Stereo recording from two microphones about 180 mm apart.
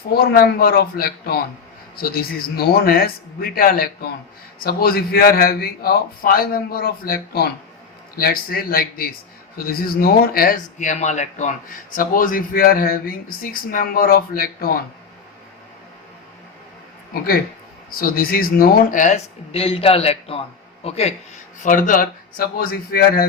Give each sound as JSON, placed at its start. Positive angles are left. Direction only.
{"t": 0.1, "sound": "a man's voice", "side_deg": 60}
{"t": 17.9, "sound": "speech", "side_deg": 55}
{"t": 21.6, "sound": "speech", "side_deg": 45}